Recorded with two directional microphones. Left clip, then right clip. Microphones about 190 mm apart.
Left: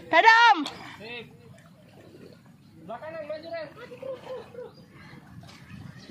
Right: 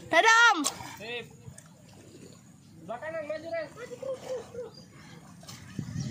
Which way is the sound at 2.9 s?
10° left (ahead or behind).